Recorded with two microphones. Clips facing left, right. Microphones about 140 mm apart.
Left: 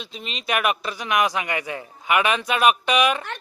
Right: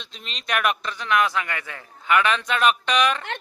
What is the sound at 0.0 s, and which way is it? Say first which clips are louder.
A man's voice: left 6 dB; 5° left (ahead or behind).